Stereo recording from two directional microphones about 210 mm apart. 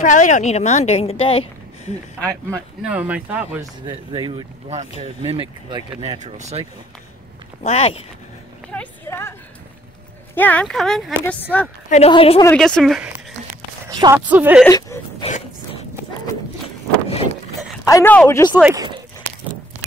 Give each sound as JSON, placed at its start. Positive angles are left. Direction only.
{"t": 0.0, "sound": "a woman's voice", "side_deg": 35}
{"t": 2.5, "sound": "speech", "side_deg": -5}
{"t": 3.8, "sound": "speech", "side_deg": -20}
{"t": 7.6, "sound": "a woman's voice", "side_deg": 30}
{"t": 8.7, "sound": "speech", "side_deg": 10}
{"t": 10.3, "sound": "speech", "side_deg": 10}
{"t": 11.9, "sound": "a woman's voice", "side_deg": 30}
{"t": 12.4, "sound": "speech", "side_deg": 5}
{"t": 13.5, "sound": "walk", "side_deg": -15}
{"t": 14.2, "sound": "speech", "side_deg": -5}
{"t": 14.7, "sound": "a sound", "side_deg": 15}
{"t": 15.2, "sound": "a sound", "side_deg": 30}
{"t": 17.8, "sound": "speech", "side_deg": 10}
{"t": 18.5, "sound": "speech", "side_deg": -10}